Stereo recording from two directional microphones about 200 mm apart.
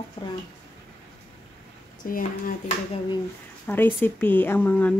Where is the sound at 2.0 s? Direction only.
45° left (ahead or behind).